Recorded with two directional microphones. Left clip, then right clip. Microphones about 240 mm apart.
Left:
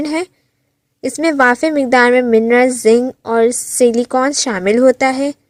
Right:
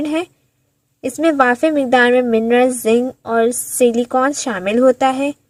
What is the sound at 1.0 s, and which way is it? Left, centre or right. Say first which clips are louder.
A woman's voice: left 2 dB; left.